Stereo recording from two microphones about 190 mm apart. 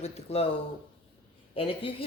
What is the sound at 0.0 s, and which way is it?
Speech, 30° left (ahead or behind).